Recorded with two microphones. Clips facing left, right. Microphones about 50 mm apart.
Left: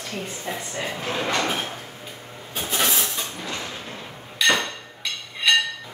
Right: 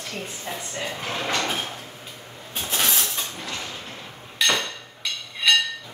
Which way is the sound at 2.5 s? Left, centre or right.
Centre.